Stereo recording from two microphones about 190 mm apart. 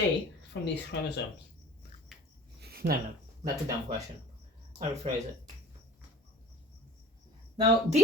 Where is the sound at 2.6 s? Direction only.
55° right (ahead or behind).